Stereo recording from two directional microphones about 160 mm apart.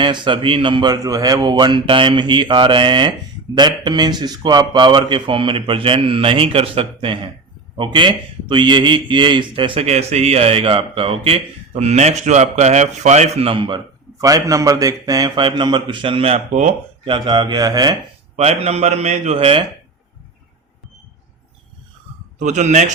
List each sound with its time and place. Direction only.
0.0 s a man's voice: 30° right (ahead or behind)
17.1 s speech: 30° right (ahead or behind)
18.3 s a man's voice: 40° right (ahead or behind)
22.4 s a man's voice: 45° right (ahead or behind)